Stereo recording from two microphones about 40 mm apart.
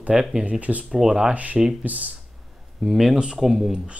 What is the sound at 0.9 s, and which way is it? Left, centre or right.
Speech, centre.